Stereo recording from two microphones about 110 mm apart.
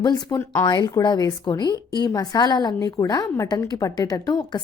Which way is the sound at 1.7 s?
35° right (ahead or behind).